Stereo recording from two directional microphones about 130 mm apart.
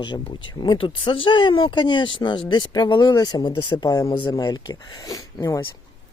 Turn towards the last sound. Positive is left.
turn(degrees=25)  # may be behind; listen again after turning